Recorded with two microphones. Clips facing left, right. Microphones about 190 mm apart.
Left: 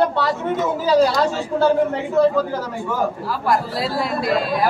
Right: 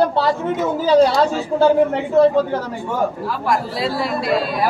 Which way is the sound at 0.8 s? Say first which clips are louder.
Right 3 dB; 25° right (ahead or behind).